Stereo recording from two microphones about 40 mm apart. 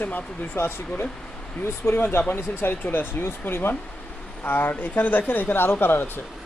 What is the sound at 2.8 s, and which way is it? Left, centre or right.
Speech, left.